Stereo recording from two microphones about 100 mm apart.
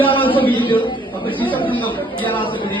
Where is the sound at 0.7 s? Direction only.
55° left (ahead or behind).